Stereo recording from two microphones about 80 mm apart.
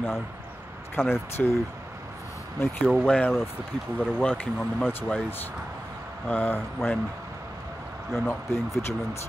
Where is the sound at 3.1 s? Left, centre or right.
Centre.